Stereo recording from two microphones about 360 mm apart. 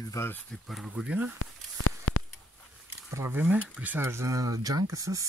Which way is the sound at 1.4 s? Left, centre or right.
Left.